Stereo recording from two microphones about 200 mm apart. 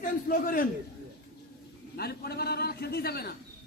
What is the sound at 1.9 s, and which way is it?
A man's voice, 50° left (ahead or behind).